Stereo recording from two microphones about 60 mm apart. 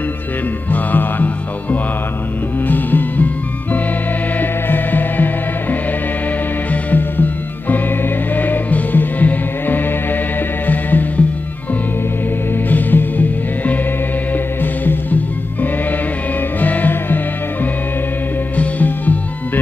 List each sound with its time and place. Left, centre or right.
0.7 s music: left
4.4 s music: left
12.6 s music: left
18.6 s music: left